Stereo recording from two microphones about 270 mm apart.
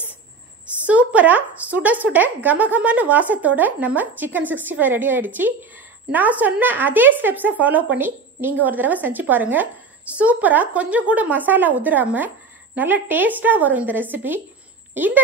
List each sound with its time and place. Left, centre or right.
0.8 s speech: centre